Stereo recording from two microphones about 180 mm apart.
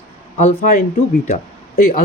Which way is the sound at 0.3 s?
45° left (ahead or behind).